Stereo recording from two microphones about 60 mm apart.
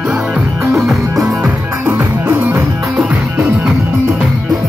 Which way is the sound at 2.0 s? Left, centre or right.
Right.